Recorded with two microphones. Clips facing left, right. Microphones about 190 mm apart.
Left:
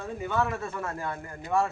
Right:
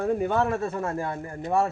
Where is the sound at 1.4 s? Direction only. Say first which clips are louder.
Right 2 dB; 40° right (ahead or behind).